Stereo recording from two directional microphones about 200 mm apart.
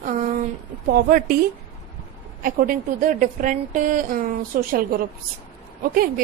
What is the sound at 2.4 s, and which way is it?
A woman's voice, 45° right (ahead or behind).